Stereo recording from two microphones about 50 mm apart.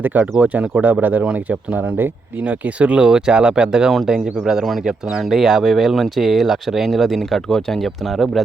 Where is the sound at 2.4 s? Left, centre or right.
Right.